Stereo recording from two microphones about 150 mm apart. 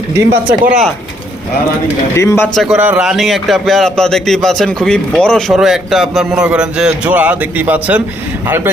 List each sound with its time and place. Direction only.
0.2 s speech: 15° right (ahead or behind)
2.1 s speech: 15° left (ahead or behind)
2.6 s a man's voice: 5° right (ahead or behind)